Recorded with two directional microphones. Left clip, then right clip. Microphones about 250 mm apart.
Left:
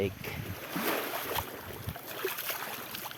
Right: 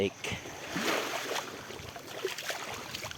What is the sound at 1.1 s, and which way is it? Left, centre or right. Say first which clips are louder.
Boat: even; centre.